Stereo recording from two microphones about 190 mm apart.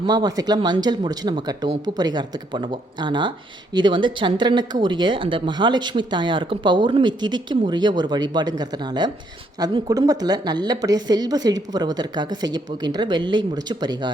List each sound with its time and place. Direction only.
0.0 s speech: 20° right (ahead or behind)